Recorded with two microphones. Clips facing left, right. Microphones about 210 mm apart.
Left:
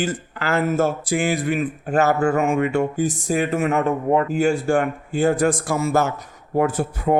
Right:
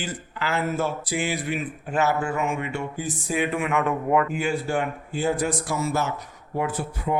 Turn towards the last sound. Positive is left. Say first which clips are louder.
# left 7 dB
turn(degrees=45)  # may be behind; listen again after turning